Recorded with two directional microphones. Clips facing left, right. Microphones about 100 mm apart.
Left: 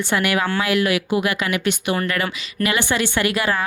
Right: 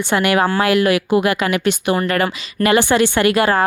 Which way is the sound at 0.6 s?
55° right (ahead or behind).